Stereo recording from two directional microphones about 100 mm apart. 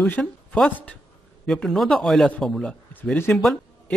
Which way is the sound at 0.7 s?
15° left (ahead or behind).